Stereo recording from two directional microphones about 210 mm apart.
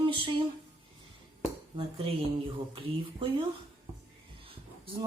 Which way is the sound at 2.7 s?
25° right (ahead or behind).